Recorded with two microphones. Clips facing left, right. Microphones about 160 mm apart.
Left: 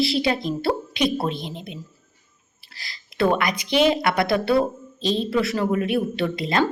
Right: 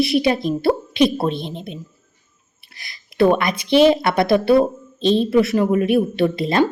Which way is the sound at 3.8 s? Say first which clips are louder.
Right 5 dB; 25° right (ahead or behind).